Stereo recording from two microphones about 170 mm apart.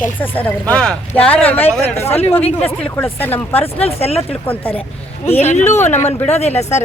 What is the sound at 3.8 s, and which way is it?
Speech, 35° left (ahead or behind).